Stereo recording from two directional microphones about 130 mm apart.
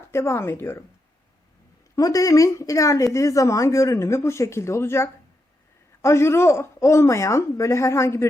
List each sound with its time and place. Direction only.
0.1 s speech: 20° left (ahead or behind)
2.0 s speech: 25° left (ahead or behind)